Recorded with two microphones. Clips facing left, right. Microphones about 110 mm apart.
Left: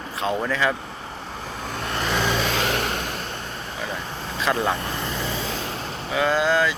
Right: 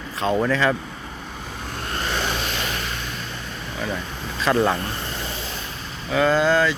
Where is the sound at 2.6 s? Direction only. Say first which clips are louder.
Left 5 dB; 75° left (ahead or behind).